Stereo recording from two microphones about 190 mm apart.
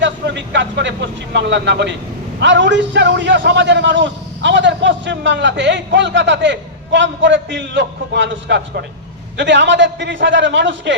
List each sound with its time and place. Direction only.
0.0 s a man's voice: 70° right (ahead or behind)